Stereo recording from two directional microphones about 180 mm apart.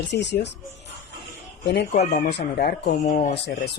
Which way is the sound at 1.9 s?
50° left (ahead or behind).